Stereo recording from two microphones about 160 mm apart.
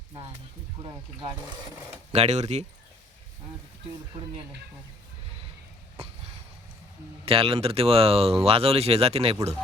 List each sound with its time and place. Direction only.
2.1 s speech: 45° right (ahead or behind)
7.3 s speech: 35° right (ahead or behind)